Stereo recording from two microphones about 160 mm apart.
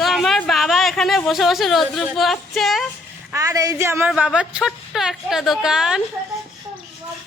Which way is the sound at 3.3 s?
20° right (ahead or behind).